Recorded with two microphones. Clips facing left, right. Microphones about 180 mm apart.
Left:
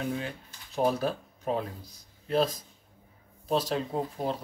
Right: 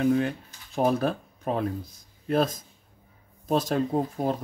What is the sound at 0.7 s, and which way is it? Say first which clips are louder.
Speech: right 3 dB; 50° right (ahead or behind).